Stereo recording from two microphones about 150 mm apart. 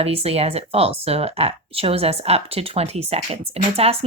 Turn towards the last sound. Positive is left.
turn(degrees=-40)  # may be behind; listen again after turning